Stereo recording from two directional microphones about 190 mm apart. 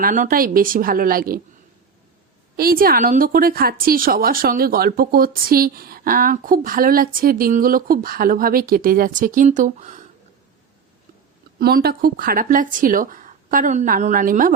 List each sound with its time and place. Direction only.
0.0 s a woman's voice: 45° right (ahead or behind)
2.6 s a woman's voice: 50° right (ahead or behind)
11.6 s a woman's voice: 55° right (ahead or behind)